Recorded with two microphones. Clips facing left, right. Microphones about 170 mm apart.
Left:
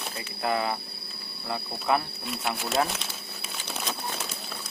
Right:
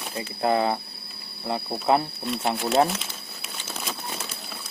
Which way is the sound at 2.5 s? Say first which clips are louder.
Right 6 dB; centre (ahead or behind).